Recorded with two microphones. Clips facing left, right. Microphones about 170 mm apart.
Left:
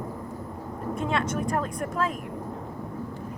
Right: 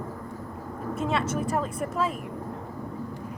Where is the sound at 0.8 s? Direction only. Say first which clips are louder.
Even; 5° right (ahead or behind).